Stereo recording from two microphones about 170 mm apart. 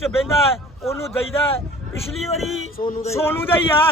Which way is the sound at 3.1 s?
15° left (ahead or behind).